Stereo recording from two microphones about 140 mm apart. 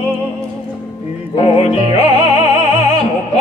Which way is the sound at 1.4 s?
50° left (ahead or behind).